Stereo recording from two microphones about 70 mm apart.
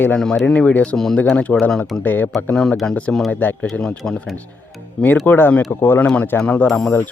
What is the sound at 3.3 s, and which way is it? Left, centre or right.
Speech, left.